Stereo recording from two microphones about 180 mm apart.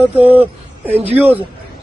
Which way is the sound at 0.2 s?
10° right (ahead or behind).